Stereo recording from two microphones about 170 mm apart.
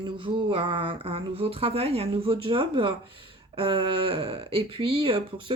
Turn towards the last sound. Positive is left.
turn(degrees=-30)  # may be behind; listen again after turning